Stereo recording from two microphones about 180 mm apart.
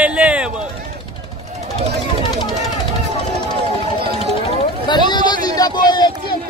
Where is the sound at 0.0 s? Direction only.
5° right (ahead or behind).